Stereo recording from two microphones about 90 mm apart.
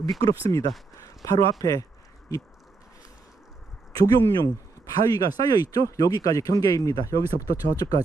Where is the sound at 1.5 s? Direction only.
45° left (ahead or behind).